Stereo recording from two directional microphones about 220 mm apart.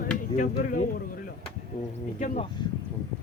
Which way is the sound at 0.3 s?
40° left (ahead or behind).